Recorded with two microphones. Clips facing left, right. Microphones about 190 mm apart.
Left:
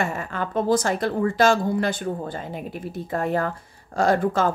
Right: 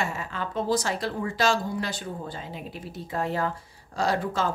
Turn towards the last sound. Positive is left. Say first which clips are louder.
# left 6 dB
turn(degrees=50)  # may be behind; listen again after turning